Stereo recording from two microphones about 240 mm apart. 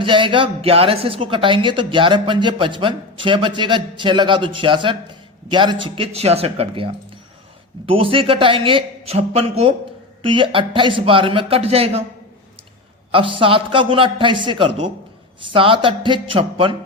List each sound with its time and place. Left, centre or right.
0.0 s speech: right
13.1 s speech: right